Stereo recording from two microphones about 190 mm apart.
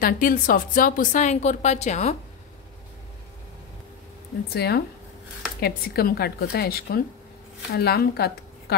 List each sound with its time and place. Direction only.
0.0 s a woman's voice: 45° left (ahead or behind)
4.5 s a woman's voice: 55° left (ahead or behind)